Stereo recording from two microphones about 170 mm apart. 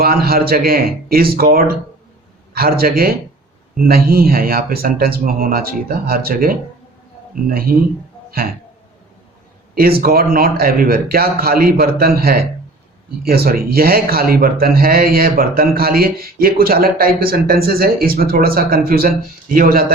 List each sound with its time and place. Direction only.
0.0 s speech: 65° right (ahead or behind)
2.5 s speech: 65° right (ahead or behind)
7.7 s speech: 60° right (ahead or behind)
9.7 s speech: 60° right (ahead or behind)